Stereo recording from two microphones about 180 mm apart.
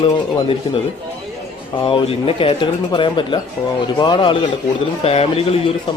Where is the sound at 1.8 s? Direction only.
30° left (ahead or behind).